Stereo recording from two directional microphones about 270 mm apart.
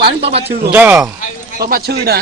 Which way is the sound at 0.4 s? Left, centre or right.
Centre.